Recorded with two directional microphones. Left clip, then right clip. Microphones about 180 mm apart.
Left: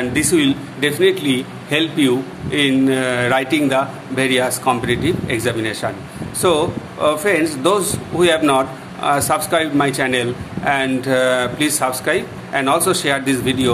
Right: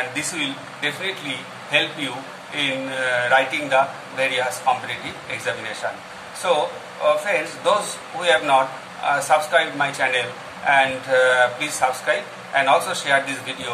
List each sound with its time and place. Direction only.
0.1 s a man's voice: 65° left (ahead or behind)